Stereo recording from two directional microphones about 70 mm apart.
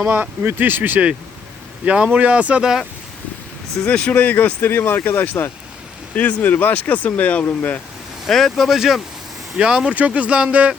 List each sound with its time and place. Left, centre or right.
0.1 s speech: right
3.8 s speech: centre
4.1 s speech: left
8.3 s speech: centre